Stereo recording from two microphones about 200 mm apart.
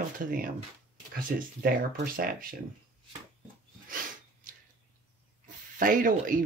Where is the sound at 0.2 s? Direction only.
45° right (ahead or behind).